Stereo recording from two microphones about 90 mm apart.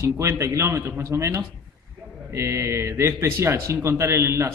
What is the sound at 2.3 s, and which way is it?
A man's voice, 30° right (ahead or behind).